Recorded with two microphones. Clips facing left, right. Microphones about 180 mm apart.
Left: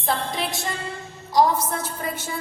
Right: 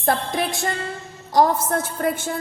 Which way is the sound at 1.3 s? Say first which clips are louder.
Right 2 dB; 50° right (ahead or behind).